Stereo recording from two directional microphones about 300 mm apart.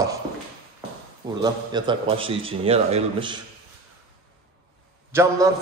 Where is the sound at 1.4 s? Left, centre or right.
Centre.